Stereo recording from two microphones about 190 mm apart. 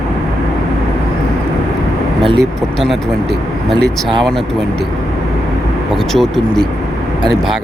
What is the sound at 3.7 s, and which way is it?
Speech, 25° right (ahead or behind).